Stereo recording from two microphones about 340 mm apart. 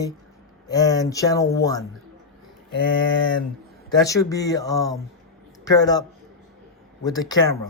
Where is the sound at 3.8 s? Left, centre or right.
Centre.